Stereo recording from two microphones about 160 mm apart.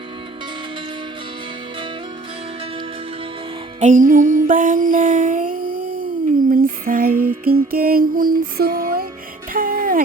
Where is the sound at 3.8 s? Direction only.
50° right (ahead or behind).